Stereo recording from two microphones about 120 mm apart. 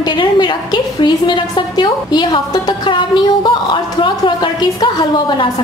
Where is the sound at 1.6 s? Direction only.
40° left (ahead or behind).